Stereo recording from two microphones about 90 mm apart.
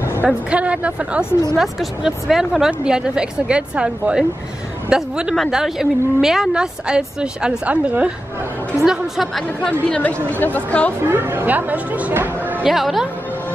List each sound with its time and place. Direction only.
0.2 s a woman's voice: 15° right (ahead or behind)
1.6 s a woman's voice: centre (ahead or behind)
9.8 s speech: 15° left (ahead or behind)
11.1 s speech: 25° right (ahead or behind)
12.6 s speech: 5° right (ahead or behind)